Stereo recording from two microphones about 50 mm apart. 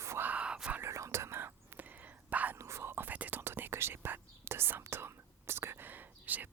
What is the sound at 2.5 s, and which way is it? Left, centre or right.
Whispering, right.